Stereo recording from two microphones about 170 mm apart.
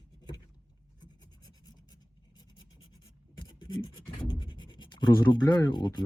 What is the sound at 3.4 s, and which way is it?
Writing, 25° left (ahead or behind).